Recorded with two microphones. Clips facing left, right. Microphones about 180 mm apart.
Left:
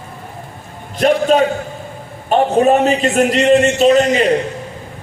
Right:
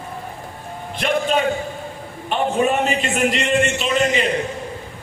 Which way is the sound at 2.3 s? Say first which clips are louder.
Left 7 dB; 40° left (ahead or behind).